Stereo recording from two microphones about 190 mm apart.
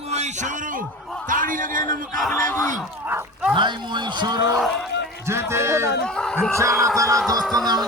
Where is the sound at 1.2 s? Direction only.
45° right (ahead or behind).